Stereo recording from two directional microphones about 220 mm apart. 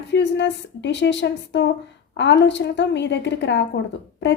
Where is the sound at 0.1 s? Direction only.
55° left (ahead or behind).